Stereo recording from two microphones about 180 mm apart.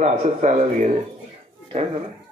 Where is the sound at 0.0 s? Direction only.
40° right (ahead or behind).